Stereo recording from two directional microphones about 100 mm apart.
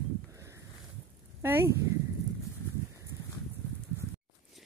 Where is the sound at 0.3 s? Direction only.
30° right (ahead or behind).